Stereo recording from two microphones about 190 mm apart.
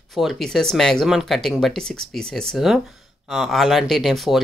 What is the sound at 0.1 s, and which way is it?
Speech, centre (ahead or behind).